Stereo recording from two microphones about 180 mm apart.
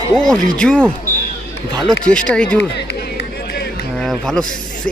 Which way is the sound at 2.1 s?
5° left (ahead or behind).